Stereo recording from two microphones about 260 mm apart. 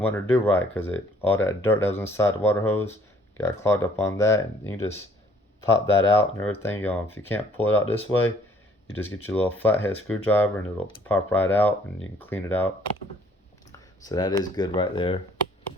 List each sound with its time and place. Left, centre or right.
0.0 s speech: centre
9.2 s speech: centre
14.1 s speech: centre